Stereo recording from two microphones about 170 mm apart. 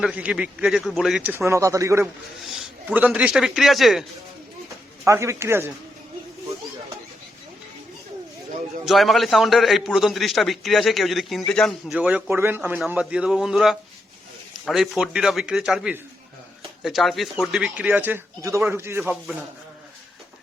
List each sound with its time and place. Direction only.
0.0 s a man's voice: 5° right (ahead or behind)
5.0 s a man's voice: 15° right (ahead or behind)
8.8 s a man's voice: centre (ahead or behind)